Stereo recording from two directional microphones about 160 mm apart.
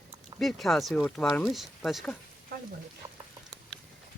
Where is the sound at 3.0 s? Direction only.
30° right (ahead or behind).